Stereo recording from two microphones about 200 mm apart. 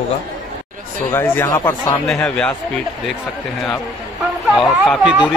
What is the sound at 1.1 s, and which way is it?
Speech, 10° left (ahead or behind).